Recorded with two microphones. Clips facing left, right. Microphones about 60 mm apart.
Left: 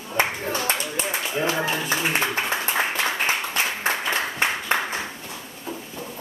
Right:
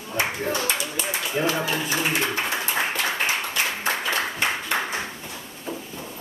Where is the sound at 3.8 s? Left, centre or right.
Left.